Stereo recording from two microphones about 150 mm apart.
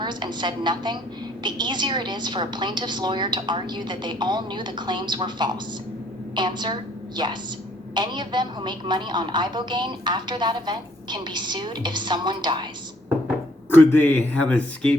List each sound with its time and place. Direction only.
0.0 s a woman's voice: 30° right (ahead or behind)
13.7 s a man's voice: 15° left (ahead or behind)